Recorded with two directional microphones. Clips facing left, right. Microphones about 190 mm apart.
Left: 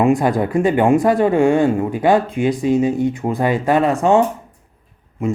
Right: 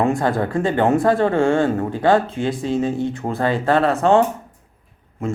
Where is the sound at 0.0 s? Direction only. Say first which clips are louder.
Left 3 dB; 15° left (ahead or behind).